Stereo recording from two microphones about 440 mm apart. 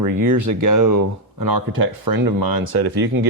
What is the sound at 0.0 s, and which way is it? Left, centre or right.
Speech, right.